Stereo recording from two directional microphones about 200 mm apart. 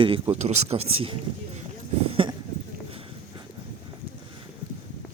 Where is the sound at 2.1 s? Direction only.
25° right (ahead or behind).